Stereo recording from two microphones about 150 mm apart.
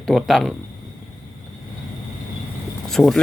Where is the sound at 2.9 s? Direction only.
Centre (ahead or behind).